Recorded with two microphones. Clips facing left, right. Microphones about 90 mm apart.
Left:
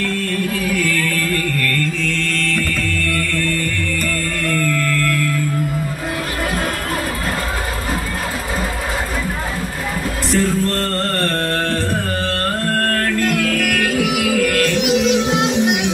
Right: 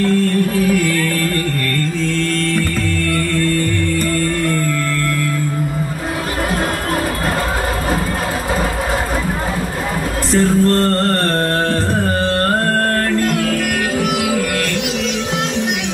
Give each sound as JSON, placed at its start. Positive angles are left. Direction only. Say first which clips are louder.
{"t": 0.8, "sound": "music", "louder": "right 2 dB", "side_deg": -25}
{"t": 10.3, "sound": "music", "louder": "right 5 dB", "side_deg": -30}
{"t": 14.8, "sound": "music", "louder": "left 5 dB", "side_deg": 10}